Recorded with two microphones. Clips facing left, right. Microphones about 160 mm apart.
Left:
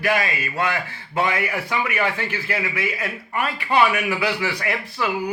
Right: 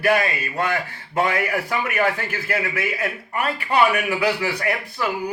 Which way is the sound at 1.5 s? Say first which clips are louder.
Right 1 dB; 45° right (ahead or behind).